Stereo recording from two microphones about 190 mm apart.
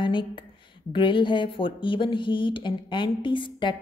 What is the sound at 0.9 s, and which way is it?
A woman's voice, 25° left (ahead or behind).